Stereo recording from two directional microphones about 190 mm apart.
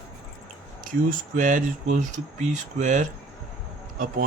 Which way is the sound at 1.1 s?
45° right (ahead or behind).